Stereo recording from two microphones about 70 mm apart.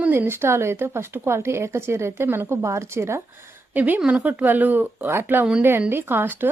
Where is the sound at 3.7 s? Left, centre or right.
Right.